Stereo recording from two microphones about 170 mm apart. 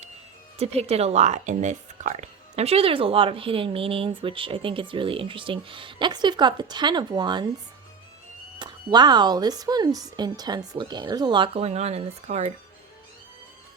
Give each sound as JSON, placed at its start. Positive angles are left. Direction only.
{"t": 0.6, "sound": "speech", "side_deg": -35}
{"t": 8.5, "sound": "speech", "side_deg": -25}